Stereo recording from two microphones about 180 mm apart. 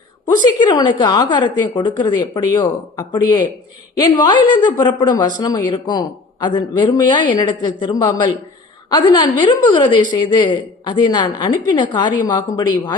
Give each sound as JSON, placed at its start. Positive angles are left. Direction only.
{"t": 0.4, "sound": "speech", "side_deg": 25}